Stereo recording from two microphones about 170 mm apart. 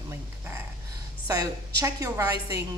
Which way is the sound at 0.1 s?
15° right (ahead or behind).